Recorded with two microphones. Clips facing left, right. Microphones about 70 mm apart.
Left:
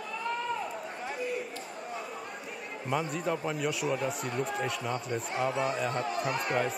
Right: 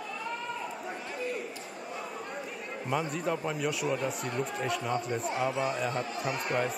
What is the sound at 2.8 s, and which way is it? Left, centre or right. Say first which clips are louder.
A man's voice: even; centre.